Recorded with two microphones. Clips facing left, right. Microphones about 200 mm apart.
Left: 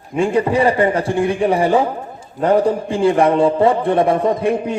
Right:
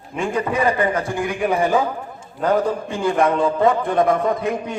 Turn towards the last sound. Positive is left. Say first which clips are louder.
# left 5 dB
turn(degrees=30)  # may be behind; listen again after turning